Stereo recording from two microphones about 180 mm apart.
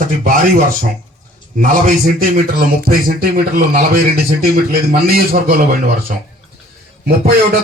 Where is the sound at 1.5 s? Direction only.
50° right (ahead or behind).